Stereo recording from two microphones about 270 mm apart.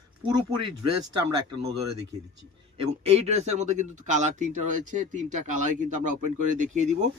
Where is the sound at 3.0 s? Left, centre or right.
Right.